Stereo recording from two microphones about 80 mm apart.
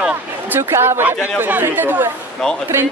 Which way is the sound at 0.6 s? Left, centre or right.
Right.